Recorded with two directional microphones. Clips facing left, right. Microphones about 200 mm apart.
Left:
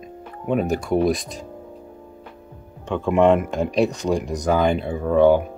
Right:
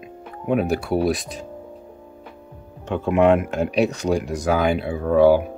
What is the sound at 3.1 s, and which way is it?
Speech, 5° right (ahead or behind).